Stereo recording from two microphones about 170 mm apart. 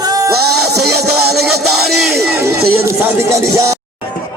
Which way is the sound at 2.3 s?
15° right (ahead or behind).